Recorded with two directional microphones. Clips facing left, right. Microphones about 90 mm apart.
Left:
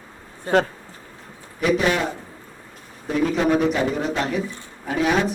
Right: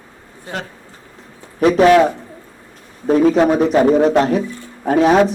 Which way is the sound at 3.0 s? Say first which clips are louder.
Right 8 dB; 40° right (ahead or behind).